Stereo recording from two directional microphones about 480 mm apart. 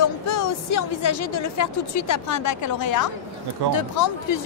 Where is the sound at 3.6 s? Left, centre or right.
Right.